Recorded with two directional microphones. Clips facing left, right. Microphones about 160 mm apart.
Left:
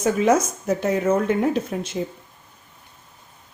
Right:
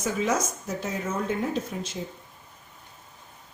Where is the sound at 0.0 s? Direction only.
60° left (ahead or behind).